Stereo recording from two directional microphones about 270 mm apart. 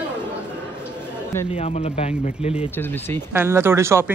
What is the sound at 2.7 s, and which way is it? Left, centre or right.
Speech, centre.